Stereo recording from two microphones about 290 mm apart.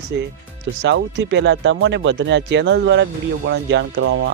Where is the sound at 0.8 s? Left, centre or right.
Right.